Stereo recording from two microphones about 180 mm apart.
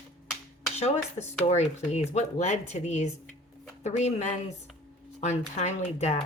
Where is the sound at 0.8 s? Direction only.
35° left (ahead or behind).